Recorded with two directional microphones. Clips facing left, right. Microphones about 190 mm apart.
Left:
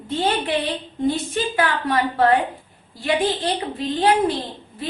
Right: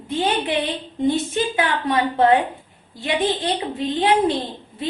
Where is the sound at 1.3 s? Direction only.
20° right (ahead or behind).